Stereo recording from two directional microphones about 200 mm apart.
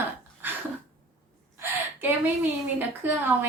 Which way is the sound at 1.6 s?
10° right (ahead or behind).